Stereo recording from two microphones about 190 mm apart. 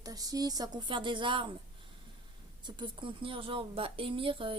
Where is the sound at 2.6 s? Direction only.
25° right (ahead or behind).